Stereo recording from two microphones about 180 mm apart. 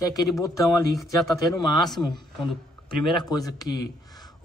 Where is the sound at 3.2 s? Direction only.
20° left (ahead or behind).